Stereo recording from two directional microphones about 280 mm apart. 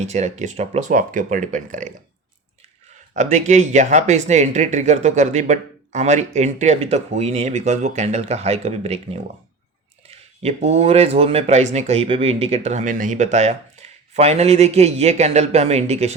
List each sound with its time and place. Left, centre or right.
0.0 s speech: right
3.2 s speech: right
10.1 s speech: right